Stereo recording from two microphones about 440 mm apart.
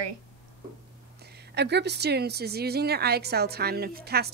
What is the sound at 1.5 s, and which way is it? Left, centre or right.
A woman's voice, right.